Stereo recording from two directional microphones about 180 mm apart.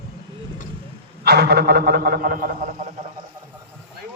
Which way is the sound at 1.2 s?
65° right (ahead or behind).